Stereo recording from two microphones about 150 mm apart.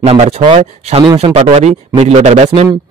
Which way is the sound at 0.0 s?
45° right (ahead or behind).